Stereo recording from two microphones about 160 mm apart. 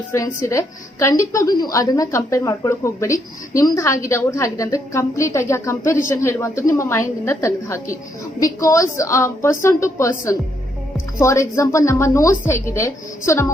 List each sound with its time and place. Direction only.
0.1 s a woman's voice: 20° left (ahead or behind)